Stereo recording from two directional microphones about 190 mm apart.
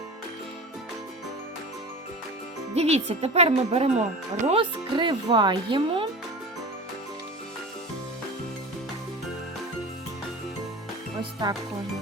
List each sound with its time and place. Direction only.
2.7 s speech: 35° right (ahead or behind)
11.2 s speech: 20° right (ahead or behind)